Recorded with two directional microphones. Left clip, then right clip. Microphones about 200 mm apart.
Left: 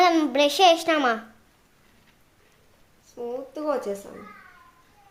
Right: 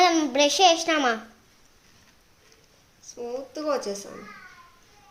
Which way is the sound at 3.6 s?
15° left (ahead or behind).